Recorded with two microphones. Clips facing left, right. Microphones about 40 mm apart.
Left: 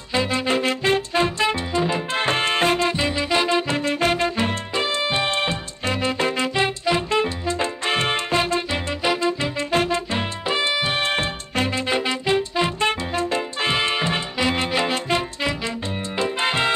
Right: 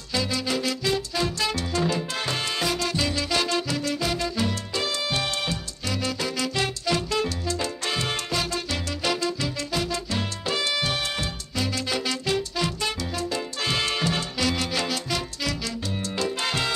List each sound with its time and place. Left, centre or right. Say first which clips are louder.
0.1 s music: left 5 dB; left
11.0 s music: left 7 dB; left